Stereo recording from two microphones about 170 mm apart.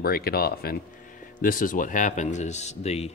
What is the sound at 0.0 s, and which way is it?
Speech, 65° left (ahead or behind).